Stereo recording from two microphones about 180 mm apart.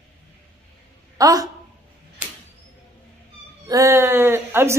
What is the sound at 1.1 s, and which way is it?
Speech, 20° right (ahead or behind).